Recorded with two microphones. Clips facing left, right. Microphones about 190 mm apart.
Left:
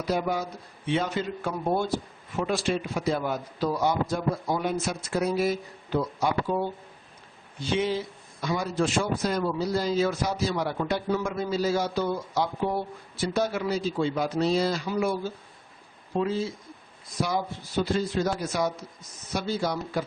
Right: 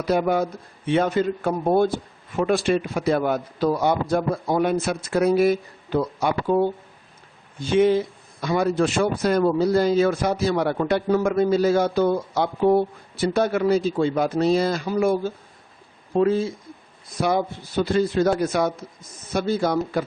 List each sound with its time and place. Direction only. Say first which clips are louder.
0.1 s speech: right 7 dB; 60° right (ahead or behind)